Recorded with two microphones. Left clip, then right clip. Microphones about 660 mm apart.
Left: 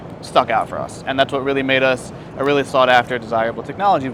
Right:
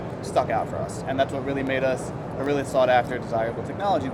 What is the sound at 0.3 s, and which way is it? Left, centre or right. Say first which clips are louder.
Speech: left 8 dB; left.